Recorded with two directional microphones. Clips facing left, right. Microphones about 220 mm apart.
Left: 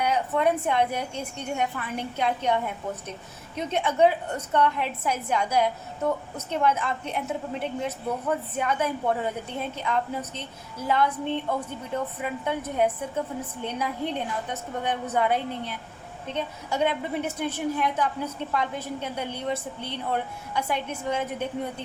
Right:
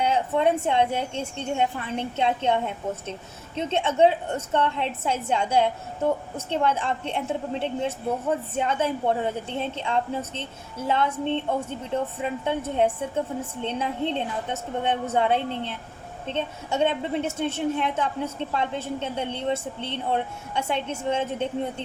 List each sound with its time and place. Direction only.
0.0 s a woman's voice: 25° right (ahead or behind)